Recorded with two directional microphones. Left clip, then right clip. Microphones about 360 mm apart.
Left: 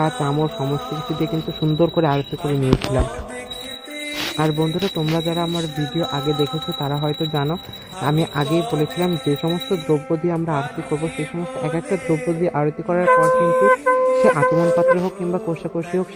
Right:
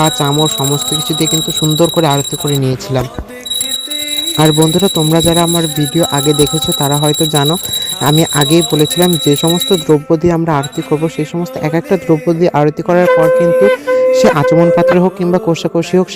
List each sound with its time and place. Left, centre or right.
0.0 s speech: centre
1.8 s speech: centre
4.4 s speech: right